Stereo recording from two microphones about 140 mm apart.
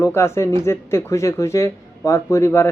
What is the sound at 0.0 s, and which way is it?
Speech, 20° left (ahead or behind).